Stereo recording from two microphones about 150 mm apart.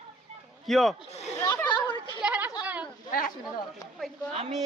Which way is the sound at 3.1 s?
65° left (ahead or behind).